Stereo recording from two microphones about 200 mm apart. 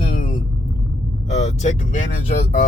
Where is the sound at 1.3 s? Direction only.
35° left (ahead or behind).